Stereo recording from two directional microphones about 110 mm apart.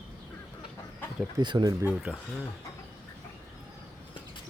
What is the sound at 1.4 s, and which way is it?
Speech, 40° right (ahead or behind).